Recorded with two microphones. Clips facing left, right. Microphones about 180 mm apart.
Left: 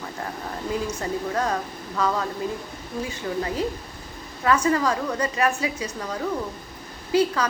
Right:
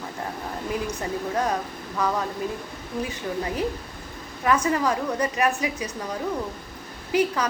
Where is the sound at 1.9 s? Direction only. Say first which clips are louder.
Left 1 dB; 10° right (ahead or behind).